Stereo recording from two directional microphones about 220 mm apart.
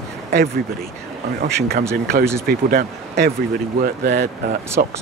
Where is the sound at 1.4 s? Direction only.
45° right (ahead or behind).